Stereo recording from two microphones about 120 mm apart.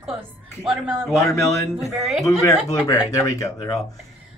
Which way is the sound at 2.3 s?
25° left (ahead or behind).